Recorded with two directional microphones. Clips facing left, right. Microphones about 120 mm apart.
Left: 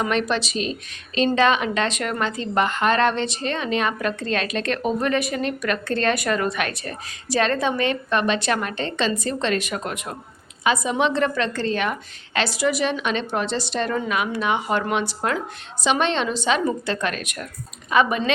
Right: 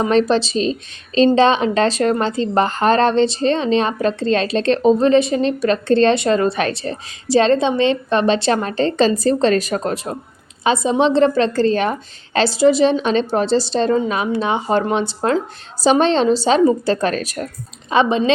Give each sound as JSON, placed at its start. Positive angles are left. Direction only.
{"t": 0.0, "sound": "a woman's voice", "side_deg": -30}